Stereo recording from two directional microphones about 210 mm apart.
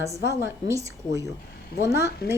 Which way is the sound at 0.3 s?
15° right (ahead or behind).